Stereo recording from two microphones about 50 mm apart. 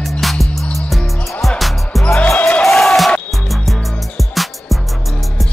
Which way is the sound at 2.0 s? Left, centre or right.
Centre.